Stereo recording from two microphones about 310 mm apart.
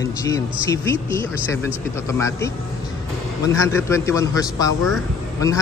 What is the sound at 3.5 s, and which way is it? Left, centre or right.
A man's voice, centre.